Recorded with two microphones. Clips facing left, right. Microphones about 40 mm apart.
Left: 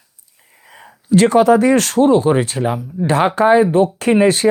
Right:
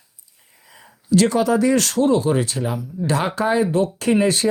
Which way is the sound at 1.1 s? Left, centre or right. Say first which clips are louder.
Left 6 dB; left.